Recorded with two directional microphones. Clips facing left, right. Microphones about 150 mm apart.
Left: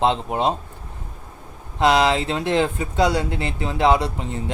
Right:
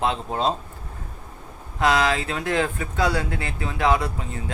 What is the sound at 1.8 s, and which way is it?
Speech, 25° left (ahead or behind).